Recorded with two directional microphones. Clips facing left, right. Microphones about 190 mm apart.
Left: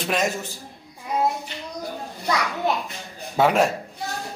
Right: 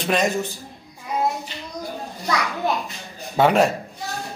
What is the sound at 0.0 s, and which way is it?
Speech, centre (ahead or behind).